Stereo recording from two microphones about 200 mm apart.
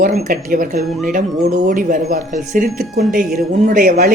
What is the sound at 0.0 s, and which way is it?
A woman's voice, 45° right (ahead or behind).